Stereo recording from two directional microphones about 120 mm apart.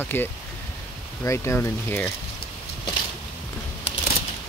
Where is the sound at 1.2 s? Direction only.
20° left (ahead or behind).